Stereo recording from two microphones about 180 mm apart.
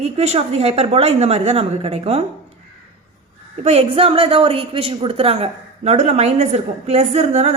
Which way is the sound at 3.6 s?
35° right (ahead or behind).